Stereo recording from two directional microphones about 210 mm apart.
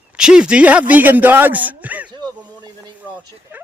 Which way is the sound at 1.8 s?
5° right (ahead or behind).